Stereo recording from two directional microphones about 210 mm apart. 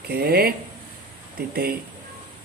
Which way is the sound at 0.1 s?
45° right (ahead or behind).